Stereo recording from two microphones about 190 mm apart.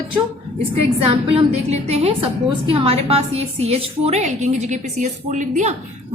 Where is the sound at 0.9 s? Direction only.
30° right (ahead or behind).